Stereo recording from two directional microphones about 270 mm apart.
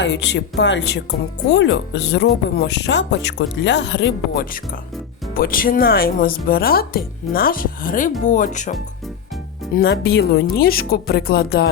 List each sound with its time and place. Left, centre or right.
0.0 s speech: left
9.7 s speech: left